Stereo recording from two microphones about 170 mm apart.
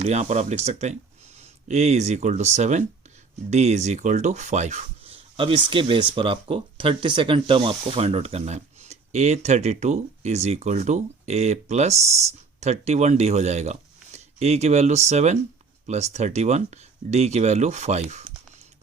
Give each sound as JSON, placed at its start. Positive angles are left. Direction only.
{"t": 0.0, "sound": "speech", "side_deg": -40}